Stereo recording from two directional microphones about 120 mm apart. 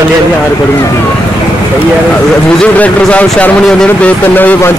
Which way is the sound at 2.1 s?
10° left (ahead or behind).